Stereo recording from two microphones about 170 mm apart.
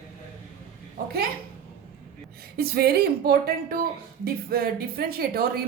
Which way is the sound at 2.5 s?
65° right (ahead or behind).